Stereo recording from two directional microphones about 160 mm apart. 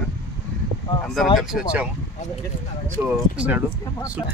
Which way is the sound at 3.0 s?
15° right (ahead or behind).